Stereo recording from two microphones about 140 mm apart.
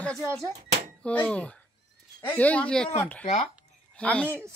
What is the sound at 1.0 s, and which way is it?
A woman's voice, 10° left (ahead or behind).